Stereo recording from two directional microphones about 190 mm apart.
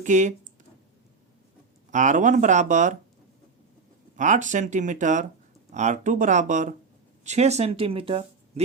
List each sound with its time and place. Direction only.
0.0 s speech: 40° right (ahead or behind)
1.9 s speech: 40° right (ahead or behind)
4.2 s speech: 40° right (ahead or behind)